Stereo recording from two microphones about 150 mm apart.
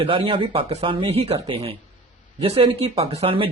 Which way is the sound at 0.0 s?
35° right (ahead or behind).